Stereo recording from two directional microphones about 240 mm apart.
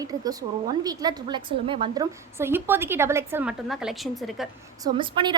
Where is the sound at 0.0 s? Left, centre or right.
Centre.